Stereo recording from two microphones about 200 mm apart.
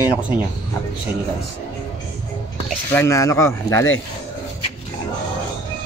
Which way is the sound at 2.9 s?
15° left (ahead or behind).